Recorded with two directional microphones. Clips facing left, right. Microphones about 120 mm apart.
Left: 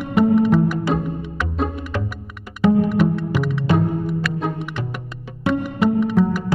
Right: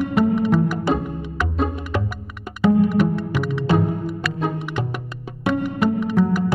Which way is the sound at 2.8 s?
Centre (ahead or behind).